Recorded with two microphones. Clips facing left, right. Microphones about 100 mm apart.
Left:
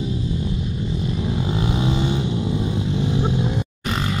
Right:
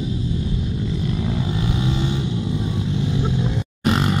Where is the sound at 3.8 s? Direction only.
35° right (ahead or behind).